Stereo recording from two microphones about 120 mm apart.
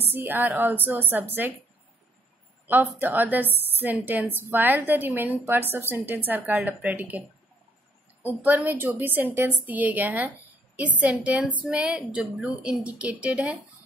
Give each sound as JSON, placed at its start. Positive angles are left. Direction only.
{"t": 0.0, "sound": "a woman's voice", "side_deg": -15}
{"t": 2.6, "sound": "a woman's voice", "side_deg": -15}
{"t": 8.5, "sound": "a woman's voice", "side_deg": -15}